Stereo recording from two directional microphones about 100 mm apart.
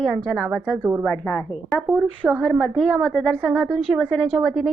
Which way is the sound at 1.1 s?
10° left (ahead or behind).